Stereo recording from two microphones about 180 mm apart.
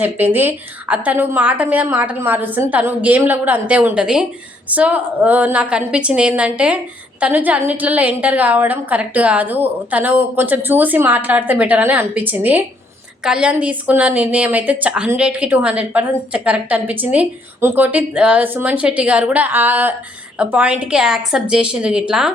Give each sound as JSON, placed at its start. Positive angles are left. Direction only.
{"t": 0.0, "sound": "a woman's voice", "side_deg": -10}